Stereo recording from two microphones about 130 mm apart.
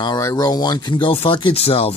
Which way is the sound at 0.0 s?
30° left (ahead or behind).